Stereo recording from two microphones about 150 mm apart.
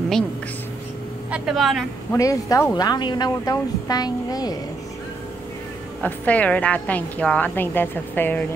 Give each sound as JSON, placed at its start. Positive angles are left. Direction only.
{"t": 1.3, "sound": "a woman's voice", "side_deg": -5}
{"t": 2.1, "sound": "a woman's voice", "side_deg": 20}
{"t": 6.0, "sound": "a woman's voice", "side_deg": 10}